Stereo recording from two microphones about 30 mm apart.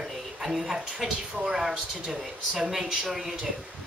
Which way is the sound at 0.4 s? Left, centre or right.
Centre.